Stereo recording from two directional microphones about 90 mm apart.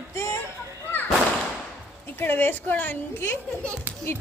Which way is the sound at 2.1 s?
25° left (ahead or behind).